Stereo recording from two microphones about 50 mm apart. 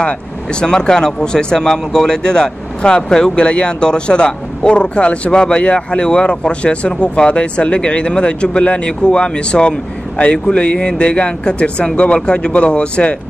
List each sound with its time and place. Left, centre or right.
0.6 s speech: centre